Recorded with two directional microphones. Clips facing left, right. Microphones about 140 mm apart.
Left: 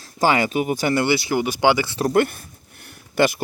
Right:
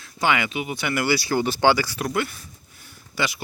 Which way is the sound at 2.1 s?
50° left (ahead or behind).